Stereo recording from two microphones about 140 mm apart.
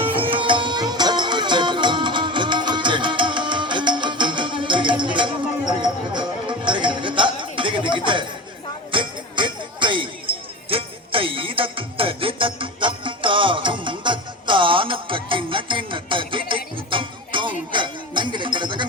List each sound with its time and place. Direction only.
0.0 s music: 40° right (ahead or behind)
6.7 s music: 35° right (ahead or behind)